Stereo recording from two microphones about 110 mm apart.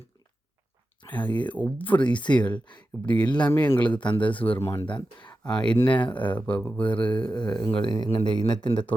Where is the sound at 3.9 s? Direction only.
45° left (ahead or behind).